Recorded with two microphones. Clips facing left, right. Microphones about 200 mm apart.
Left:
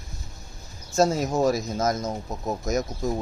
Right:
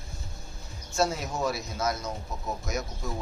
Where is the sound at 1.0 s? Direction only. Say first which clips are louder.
Left 7 dB; 40° left (ahead or behind).